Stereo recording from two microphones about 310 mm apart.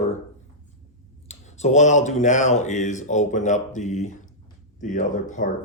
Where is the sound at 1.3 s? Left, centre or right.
Left.